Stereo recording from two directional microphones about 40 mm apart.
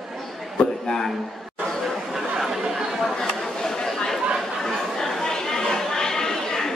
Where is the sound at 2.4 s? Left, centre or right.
Centre.